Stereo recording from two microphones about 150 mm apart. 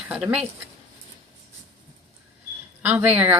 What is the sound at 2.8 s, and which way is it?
Speech, 10° right (ahead or behind).